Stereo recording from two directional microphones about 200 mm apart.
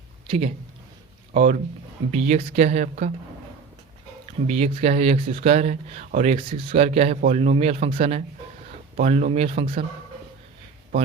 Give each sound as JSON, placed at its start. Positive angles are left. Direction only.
{"t": 0.3, "sound": "speech", "side_deg": -30}
{"t": 4.4, "sound": "speech", "side_deg": -30}